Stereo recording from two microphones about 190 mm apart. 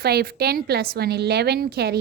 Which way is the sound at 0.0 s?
55° right (ahead or behind).